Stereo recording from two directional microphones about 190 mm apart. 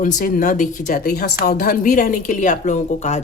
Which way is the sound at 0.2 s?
45° left (ahead or behind).